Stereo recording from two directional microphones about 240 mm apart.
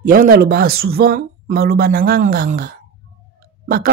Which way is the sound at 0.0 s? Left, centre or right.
Right.